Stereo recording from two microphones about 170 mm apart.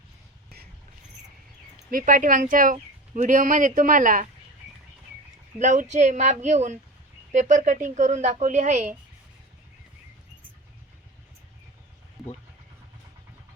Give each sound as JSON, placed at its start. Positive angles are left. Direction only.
{"t": 1.9, "sound": "speech", "side_deg": -55}
{"t": 5.5, "sound": "speech", "side_deg": -45}